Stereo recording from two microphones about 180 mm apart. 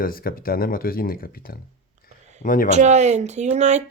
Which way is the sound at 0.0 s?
55° left (ahead or behind).